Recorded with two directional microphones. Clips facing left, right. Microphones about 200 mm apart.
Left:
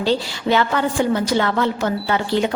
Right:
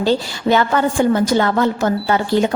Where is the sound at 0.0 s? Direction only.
45° right (ahead or behind).